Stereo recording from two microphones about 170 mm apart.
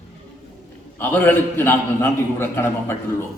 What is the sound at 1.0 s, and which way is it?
A man's voice, 10° left (ahead or behind).